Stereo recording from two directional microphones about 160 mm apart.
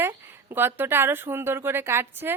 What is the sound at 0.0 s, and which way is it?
Speech, 15° right (ahead or behind).